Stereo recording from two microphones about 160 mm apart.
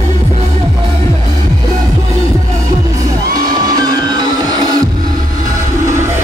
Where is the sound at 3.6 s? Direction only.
25° right (ahead or behind).